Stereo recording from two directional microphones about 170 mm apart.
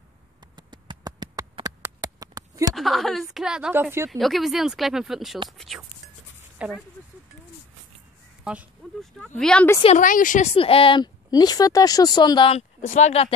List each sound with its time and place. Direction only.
0.6 s a sound: 25° right (ahead or behind)
2.7 s a woman's voice: centre (ahead or behind)
4.1 s a woman's voice: centre (ahead or behind)
6.6 s speech: 5° right (ahead or behind)
8.5 s speech: 5° right (ahead or behind)
9.2 s a woman's voice: 5° left (ahead or behind)
9.8 s a woman's voice: 50° left (ahead or behind); by 12.6 s 30° left (ahead or behind)
12.8 s speech: 45° left (ahead or behind)